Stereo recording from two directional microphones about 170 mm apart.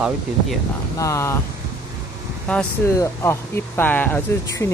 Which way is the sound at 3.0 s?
15° left (ahead or behind).